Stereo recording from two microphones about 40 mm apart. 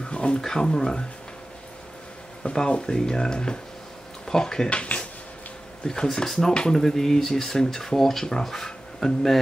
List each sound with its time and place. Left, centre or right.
0.1 s a sound: left
0.4 s speech: centre
2.4 s speech: left
2.9 s speech: centre
4.6 s speech: left
5.9 s speech: centre